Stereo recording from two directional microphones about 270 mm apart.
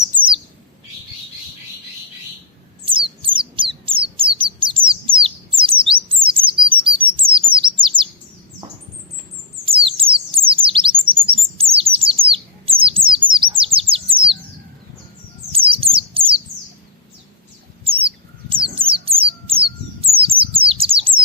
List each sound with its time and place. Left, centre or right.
0.2 s bird: centre
2.8 s bird: centre
6.2 s chirp: centre
9.6 s bird: centre
15.5 s bird: right
18.0 s bird: centre